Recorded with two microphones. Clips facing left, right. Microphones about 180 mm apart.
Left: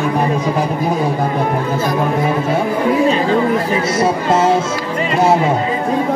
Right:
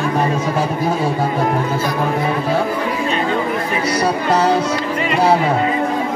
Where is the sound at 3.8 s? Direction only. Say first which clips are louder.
Left 2 dB; 25° left (ahead or behind).